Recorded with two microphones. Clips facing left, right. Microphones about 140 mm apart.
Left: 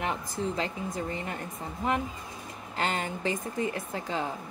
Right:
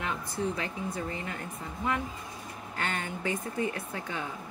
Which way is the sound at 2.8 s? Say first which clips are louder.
Left 4 dB; 25° left (ahead or behind).